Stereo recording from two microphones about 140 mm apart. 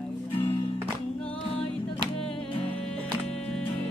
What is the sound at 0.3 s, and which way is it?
Music, 40° left (ahead or behind).